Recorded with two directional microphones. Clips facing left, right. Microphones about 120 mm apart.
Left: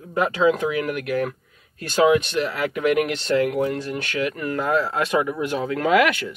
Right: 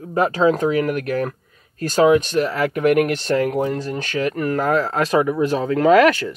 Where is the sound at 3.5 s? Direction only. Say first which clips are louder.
Right 2 dB; 35° right (ahead or behind).